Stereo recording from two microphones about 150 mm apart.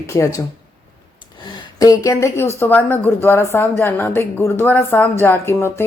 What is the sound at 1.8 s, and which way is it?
Speech, 25° left (ahead or behind).